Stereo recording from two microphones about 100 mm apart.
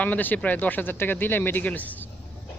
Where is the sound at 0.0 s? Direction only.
15° left (ahead or behind).